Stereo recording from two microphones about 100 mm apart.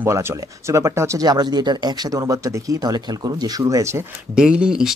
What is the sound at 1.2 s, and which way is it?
Speech, 45° right (ahead or behind).